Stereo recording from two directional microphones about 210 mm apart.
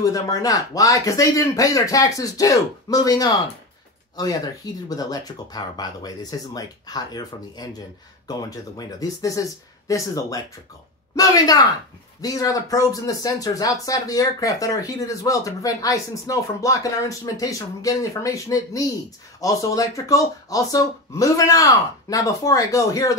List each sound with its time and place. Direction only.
0.0 s speech: 15° left (ahead or behind)